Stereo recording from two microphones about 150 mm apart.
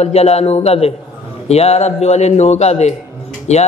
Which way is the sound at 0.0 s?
45° left (ahead or behind).